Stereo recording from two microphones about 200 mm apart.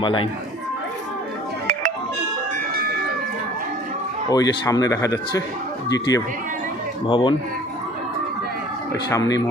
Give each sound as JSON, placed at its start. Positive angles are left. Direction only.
{"t": 0.0, "sound": "a man's voice", "side_deg": 25}
{"t": 4.3, "sound": "a man's voice", "side_deg": 20}
{"t": 8.9, "sound": "speech", "side_deg": 15}